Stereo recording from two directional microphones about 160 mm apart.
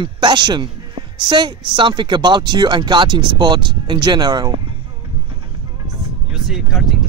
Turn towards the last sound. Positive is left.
turn(degrees=0)  # may be behind; listen again after turning